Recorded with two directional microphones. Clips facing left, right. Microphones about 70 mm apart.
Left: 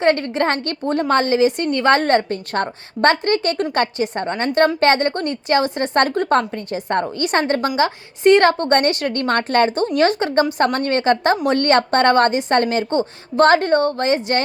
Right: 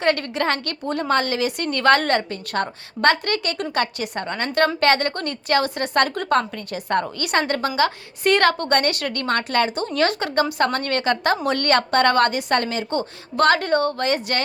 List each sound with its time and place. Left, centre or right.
0.0 s a woman's voice: left
9.9 s a woman's voice: left